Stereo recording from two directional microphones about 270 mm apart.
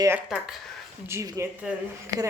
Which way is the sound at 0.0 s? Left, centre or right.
Centre.